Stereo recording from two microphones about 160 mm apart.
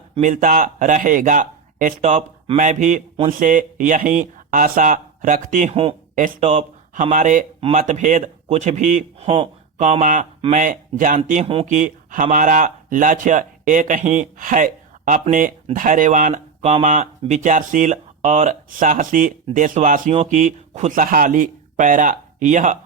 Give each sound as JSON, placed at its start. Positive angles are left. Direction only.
{"t": 0.2, "sound": "speech", "side_deg": -50}
{"t": 5.7, "sound": "speech", "side_deg": -35}
{"t": 6.1, "sound": "speech", "side_deg": -50}
{"t": 11.6, "sound": "speech", "side_deg": -50}